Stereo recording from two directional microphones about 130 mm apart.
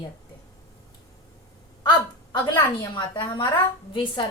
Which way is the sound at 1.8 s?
35° left (ahead or behind).